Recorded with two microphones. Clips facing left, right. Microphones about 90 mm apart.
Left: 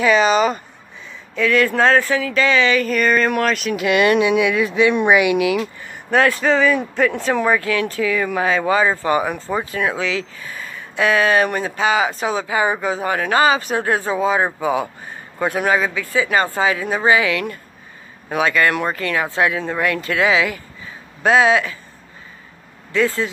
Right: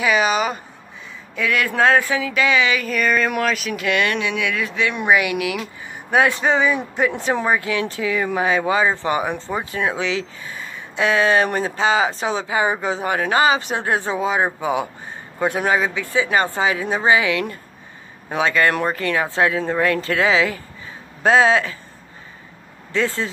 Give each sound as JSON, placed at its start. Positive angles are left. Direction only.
{"t": 0.0, "sound": "speech", "side_deg": -5}
{"t": 3.8, "sound": "speech", "side_deg": 15}
{"t": 6.0, "sound": "speech", "side_deg": -15}
{"t": 22.9, "sound": "speech", "side_deg": -30}